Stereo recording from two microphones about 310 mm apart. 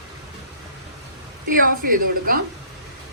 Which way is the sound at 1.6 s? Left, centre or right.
Right.